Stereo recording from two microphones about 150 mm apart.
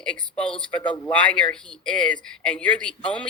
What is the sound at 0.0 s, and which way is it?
Speech, 5° left (ahead or behind).